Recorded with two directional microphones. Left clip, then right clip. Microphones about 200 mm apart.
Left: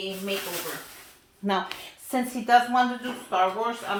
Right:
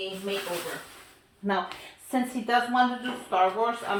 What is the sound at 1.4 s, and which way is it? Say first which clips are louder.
Speech: left 1 dB; 55° left (ahead or behind).